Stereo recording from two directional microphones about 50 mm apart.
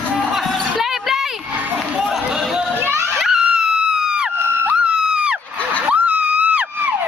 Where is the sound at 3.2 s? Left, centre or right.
Centre.